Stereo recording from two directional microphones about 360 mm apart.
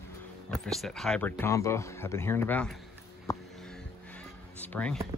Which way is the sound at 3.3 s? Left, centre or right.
Centre.